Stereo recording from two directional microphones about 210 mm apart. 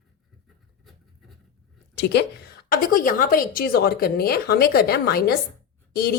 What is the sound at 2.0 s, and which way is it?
A woman's voice, 55° left (ahead or behind).